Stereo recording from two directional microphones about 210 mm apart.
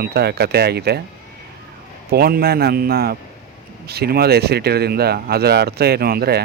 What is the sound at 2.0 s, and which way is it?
Speech, 45° right (ahead or behind).